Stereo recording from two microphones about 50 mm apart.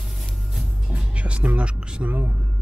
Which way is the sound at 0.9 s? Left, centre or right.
Right.